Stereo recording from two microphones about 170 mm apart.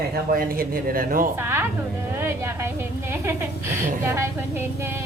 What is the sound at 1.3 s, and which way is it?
A woman's voice, 15° right (ahead or behind).